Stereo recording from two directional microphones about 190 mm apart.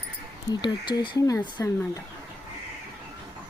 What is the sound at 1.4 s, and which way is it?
Speech, 10° left (ahead or behind).